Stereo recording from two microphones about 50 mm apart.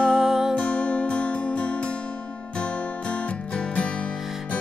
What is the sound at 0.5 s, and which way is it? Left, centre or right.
Music, left.